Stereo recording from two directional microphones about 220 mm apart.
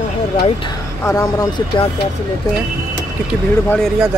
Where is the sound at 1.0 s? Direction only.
15° left (ahead or behind).